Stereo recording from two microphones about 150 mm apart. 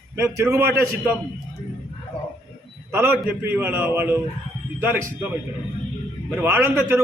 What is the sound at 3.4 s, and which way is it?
A man's voice, 10° right (ahead or behind).